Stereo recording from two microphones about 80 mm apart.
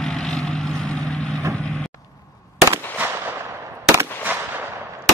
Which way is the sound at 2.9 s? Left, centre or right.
Right.